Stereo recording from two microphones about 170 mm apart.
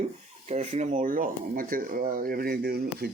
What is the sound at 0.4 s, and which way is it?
Speech, 40° right (ahead or behind).